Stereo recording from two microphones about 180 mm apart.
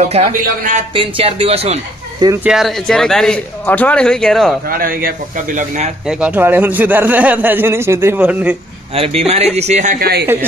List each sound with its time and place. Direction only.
0.0 s speech: 35° right (ahead or behind)
2.4 s a man's voice: centre (ahead or behind)
4.6 s a man's voice: 55° right (ahead or behind)
6.0 s speech: 5° right (ahead or behind)
8.9 s a man's voice: 35° right (ahead or behind); by 10.2 s 55° right (ahead or behind)